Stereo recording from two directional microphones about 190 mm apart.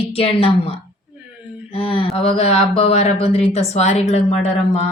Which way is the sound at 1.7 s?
30° left (ahead or behind).